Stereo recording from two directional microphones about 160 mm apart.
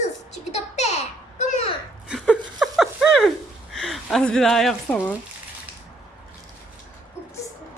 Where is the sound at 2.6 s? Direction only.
Centre (ahead or behind).